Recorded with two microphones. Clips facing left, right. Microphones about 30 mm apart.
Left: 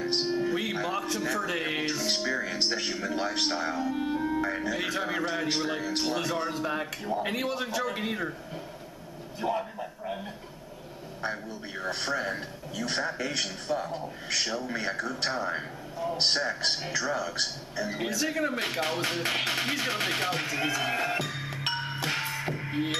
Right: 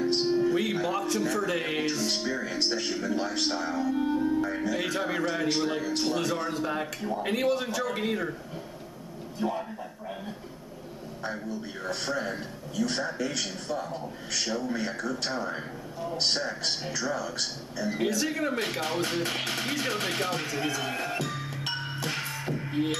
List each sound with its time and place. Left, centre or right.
0.2 s music: centre
2.1 s a man's voice: centre
4.5 s speech: centre
9.4 s a sound: centre
11.8 s a man's voice: centre
17.9 s speech: centre
21.7 s music: centre